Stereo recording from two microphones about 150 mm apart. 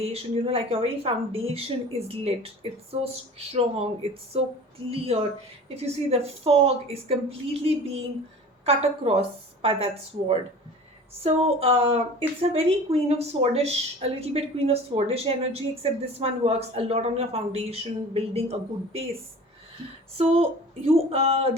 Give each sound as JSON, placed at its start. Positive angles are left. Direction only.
{"t": 0.0, "sound": "a woman's voice", "side_deg": -40}
{"t": 20.1, "sound": "speech", "side_deg": -40}